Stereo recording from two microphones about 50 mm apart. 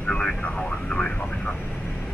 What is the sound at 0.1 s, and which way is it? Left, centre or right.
Speech, centre.